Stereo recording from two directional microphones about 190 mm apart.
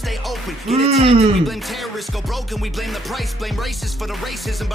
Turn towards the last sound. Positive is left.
turn(degrees=0)  # may be behind; listen again after turning